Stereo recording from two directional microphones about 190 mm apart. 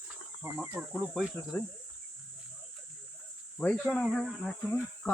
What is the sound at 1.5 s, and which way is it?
Speech, 15° left (ahead or behind).